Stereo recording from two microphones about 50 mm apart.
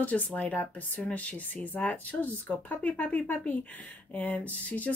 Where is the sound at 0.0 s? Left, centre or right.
Left.